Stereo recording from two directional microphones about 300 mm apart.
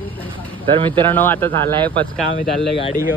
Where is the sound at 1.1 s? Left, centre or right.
Centre.